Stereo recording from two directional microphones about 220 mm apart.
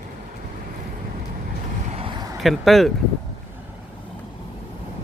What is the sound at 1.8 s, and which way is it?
Vehicle, 25° right (ahead or behind).